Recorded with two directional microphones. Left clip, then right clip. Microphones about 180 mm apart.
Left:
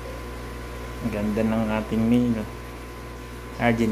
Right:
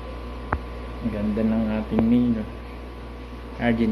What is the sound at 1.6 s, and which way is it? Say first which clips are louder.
Speech: right 1 dB; 5° left (ahead or behind).